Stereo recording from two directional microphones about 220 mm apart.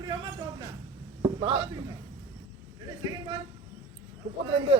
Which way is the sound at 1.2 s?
25° right (ahead or behind).